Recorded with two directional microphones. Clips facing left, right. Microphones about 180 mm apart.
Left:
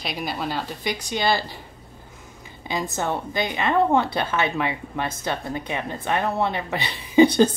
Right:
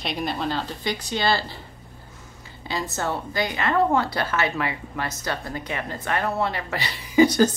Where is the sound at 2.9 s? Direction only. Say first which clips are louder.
Even; 20° left (ahead or behind).